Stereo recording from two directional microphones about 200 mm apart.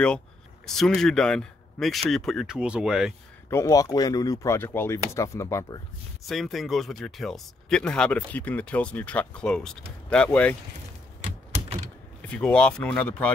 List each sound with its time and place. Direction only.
0.7 s speech: 5° left (ahead or behind)
3.4 s speech: 15° left (ahead or behind)
6.2 s speech: centre (ahead or behind)
12.2 s speech: 5° left (ahead or behind)